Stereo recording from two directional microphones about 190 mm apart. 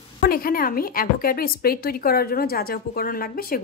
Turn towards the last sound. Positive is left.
turn(degrees=50)  # may be behind; listen again after turning